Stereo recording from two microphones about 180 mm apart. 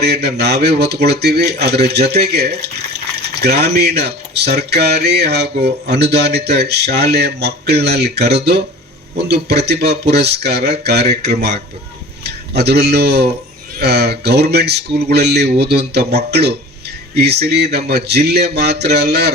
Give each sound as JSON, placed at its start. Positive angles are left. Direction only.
{"t": 0.0, "sound": "speech", "side_deg": -65}